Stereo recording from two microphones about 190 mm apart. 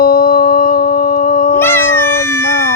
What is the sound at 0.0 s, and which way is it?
Howl, 50° left (ahead or behind).